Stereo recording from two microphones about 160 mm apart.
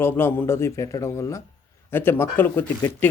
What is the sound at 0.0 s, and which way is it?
Speech, 15° left (ahead or behind).